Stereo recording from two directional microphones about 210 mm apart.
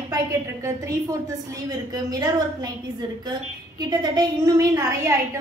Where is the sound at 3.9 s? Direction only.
20° right (ahead or behind).